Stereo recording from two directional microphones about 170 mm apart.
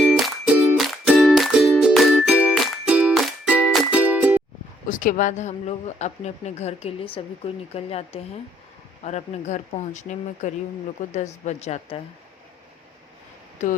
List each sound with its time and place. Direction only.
0.0 s music: 5° right (ahead or behind)
4.9 s speech: 50° left (ahead or behind)
13.6 s speech: 45° left (ahead or behind)